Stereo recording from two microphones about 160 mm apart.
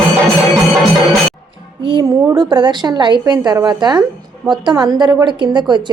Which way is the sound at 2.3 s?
25° right (ahead or behind).